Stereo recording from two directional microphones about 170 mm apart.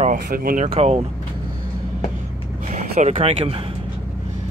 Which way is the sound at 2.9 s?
40° right (ahead or behind).